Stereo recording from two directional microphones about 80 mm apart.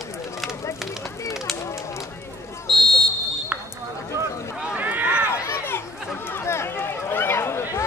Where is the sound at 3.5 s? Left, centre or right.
Centre.